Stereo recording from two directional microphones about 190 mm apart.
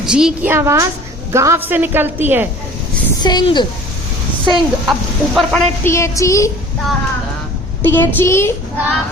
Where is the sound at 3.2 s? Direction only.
20° left (ahead or behind).